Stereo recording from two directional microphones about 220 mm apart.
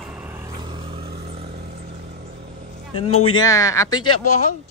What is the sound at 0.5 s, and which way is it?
Vehicle, 25° right (ahead or behind).